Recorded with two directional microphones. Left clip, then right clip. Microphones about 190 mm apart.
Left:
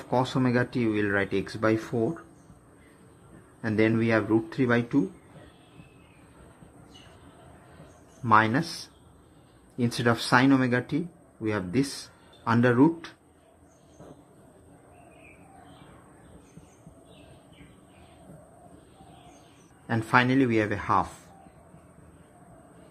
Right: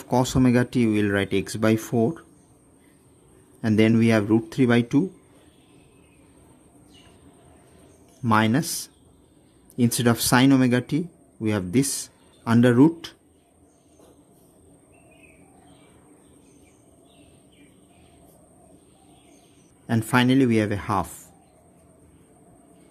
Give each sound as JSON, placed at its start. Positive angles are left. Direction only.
{"t": 0.1, "sound": "speech", "side_deg": -90}
{"t": 3.6, "sound": "speech", "side_deg": -90}
{"t": 8.2, "sound": "speech", "side_deg": -80}
{"t": 19.9, "sound": "speech", "side_deg": -80}